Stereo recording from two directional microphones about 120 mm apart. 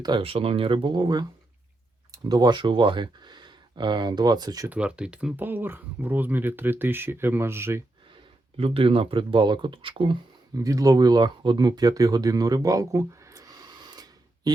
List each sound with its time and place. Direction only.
0.2 s speech: 50° right (ahead or behind); by 4.7 s 30° right (ahead or behind)
4.7 s speech: 10° right (ahead or behind)
8.5 s speech: 55° right (ahead or behind)
10.5 s speech: 30° right (ahead or behind)